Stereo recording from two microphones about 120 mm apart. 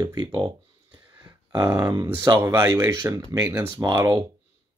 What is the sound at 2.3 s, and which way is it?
Speech, 25° right (ahead or behind).